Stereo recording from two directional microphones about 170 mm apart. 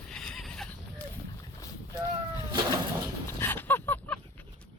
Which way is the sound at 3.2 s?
15° left (ahead or behind).